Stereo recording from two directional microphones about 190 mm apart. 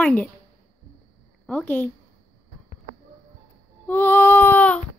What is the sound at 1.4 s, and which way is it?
Speech, 10° left (ahead or behind).